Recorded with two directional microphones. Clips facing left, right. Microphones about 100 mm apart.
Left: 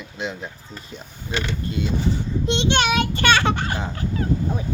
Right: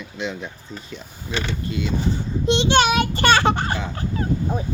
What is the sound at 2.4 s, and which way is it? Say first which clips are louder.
Speech: right 4 dB; 30° right (ahead or behind).